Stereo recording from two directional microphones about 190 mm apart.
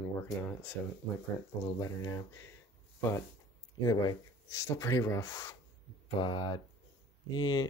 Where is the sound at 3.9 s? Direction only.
20° left (ahead or behind).